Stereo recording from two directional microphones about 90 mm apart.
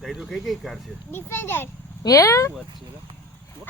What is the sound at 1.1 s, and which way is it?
Speech, 25° left (ahead or behind).